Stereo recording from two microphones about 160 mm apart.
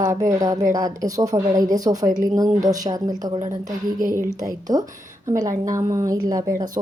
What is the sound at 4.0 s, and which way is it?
Speech, 60° right (ahead or behind).